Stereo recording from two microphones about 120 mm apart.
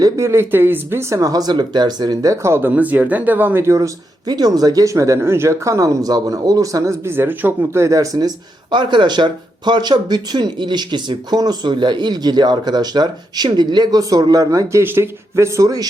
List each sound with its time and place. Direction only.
0.0 s speech: 25° right (ahead or behind)
8.7 s speech: 40° right (ahead or behind)